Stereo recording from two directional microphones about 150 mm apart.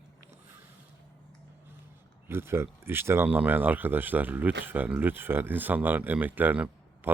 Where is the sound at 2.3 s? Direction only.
15° right (ahead or behind).